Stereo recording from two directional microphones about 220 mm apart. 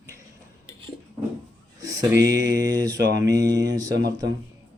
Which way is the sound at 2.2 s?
15° right (ahead or behind).